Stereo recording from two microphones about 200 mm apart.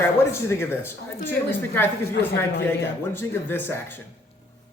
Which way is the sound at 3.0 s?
10° left (ahead or behind).